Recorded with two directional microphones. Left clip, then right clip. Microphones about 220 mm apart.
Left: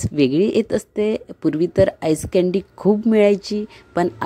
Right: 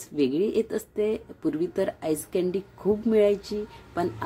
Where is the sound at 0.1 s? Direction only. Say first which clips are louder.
Left 7 dB; 35° left (ahead or behind).